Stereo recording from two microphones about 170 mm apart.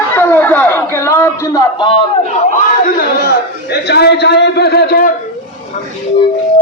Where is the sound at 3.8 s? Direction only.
75° left (ahead or behind).